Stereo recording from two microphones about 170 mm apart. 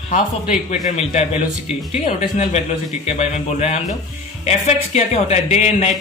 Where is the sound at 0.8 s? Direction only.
40° left (ahead or behind).